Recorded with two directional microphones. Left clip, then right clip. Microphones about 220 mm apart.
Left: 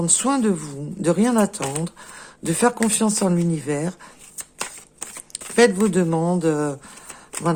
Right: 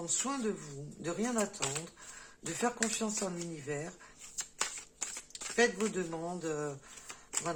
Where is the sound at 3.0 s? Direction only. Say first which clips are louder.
Left 15 dB; 50° left (ahead or behind).